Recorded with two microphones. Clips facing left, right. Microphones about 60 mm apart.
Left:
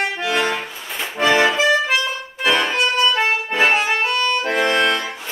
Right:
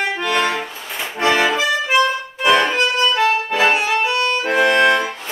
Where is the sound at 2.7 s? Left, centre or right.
Centre.